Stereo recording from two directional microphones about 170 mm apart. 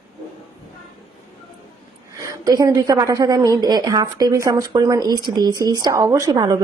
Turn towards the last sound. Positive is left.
turn(degrees=-20)  # may be behind; listen again after turning